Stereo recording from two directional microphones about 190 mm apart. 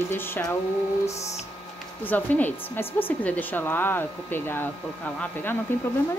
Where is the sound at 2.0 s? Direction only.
10° left (ahead or behind).